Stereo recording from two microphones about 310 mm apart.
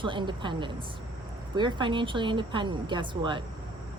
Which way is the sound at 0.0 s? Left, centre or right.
Centre.